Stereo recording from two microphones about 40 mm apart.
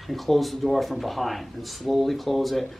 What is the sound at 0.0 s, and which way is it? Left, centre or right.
Speech, centre.